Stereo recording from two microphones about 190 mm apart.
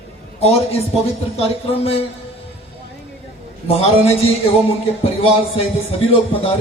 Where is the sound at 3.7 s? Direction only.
30° left (ahead or behind).